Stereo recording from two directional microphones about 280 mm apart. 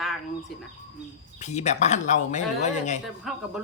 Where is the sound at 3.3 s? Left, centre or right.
Centre.